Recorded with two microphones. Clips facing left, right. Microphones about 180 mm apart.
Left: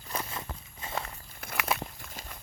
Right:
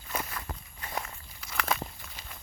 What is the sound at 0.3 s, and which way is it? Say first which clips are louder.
Walk: even; 25° left (ahead or behind).